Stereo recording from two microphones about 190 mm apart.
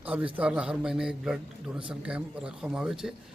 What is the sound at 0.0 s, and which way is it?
A man's voice, 5° right (ahead or behind).